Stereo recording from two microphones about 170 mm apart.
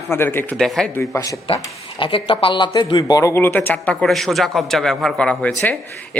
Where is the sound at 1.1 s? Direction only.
20° left (ahead or behind).